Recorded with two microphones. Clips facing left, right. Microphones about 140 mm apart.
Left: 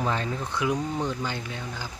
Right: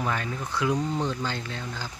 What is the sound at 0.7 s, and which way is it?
Speech, 10° left (ahead or behind).